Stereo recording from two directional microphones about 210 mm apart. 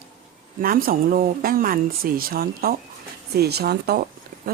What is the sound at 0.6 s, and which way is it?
Speech, 45° right (ahead or behind).